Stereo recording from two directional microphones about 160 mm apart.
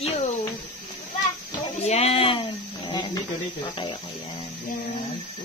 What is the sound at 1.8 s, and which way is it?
Speech, 40° left (ahead or behind).